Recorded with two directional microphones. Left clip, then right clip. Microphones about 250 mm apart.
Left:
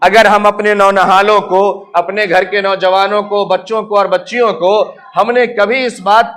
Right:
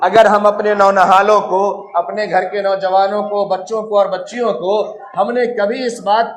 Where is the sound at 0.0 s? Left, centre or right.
Left.